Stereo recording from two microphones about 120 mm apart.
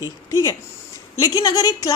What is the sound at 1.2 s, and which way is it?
Speech, 30° left (ahead or behind).